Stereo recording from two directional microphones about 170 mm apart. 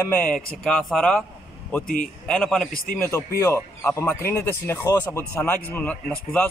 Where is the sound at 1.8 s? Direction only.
55° left (ahead or behind).